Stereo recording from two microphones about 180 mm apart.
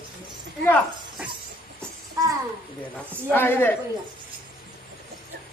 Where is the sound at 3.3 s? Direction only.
10° left (ahead or behind).